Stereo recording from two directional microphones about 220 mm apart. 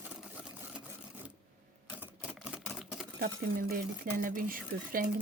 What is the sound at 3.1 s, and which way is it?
Speech, 45° right (ahead or behind).